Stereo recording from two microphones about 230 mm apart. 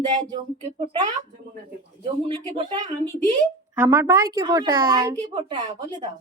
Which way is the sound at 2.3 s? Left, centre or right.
Right.